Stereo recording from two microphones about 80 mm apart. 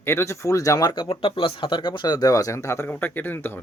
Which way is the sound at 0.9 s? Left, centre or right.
Left.